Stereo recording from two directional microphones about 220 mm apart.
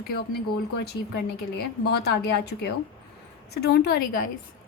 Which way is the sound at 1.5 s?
45° left (ahead or behind).